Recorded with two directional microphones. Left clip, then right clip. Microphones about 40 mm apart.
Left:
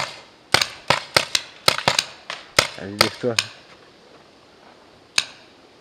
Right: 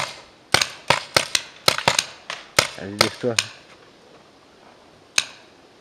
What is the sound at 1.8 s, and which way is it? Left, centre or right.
Crushing, centre.